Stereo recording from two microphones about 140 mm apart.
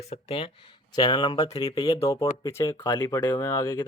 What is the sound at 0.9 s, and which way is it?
Speech, 30° left (ahead or behind).